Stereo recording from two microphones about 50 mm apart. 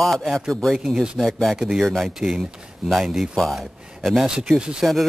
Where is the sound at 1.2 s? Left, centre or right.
Centre.